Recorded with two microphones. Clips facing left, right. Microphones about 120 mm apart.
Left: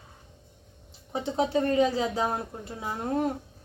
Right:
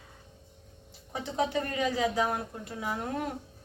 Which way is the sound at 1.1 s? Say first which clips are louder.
Left 4 dB; 30° left (ahead or behind).